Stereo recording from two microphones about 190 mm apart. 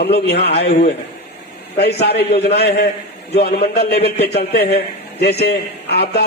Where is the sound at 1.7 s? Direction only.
60° left (ahead or behind).